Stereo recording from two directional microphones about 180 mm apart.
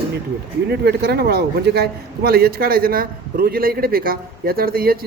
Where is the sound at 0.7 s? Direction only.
65° right (ahead or behind).